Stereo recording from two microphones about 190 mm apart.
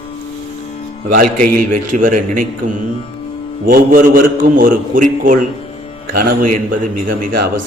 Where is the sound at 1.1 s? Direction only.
50° right (ahead or behind).